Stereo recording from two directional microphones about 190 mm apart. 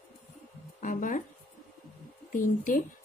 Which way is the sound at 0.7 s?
45° left (ahead or behind).